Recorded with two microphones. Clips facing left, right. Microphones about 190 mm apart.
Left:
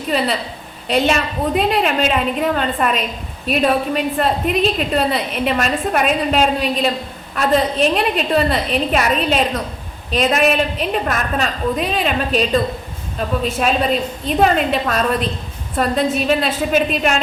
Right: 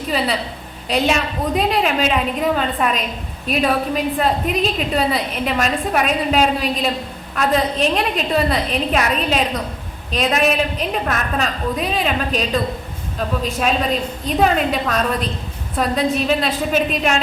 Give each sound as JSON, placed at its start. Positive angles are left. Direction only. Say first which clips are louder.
{"t": 0.1, "sound": "a woman's voice", "louder": "left 2 dB", "side_deg": 0}